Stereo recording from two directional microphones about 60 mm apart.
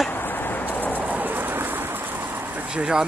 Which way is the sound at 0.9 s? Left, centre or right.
Right.